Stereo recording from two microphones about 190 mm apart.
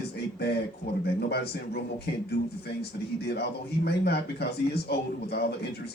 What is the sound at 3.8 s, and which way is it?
A man's voice, 60° left (ahead or behind).